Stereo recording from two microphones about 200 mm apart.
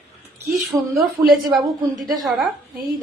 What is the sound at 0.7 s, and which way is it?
Speech, 15° right (ahead or behind).